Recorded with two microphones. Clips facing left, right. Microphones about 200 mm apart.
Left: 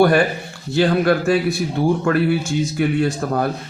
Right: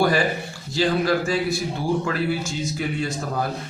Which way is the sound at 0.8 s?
60° left (ahead or behind).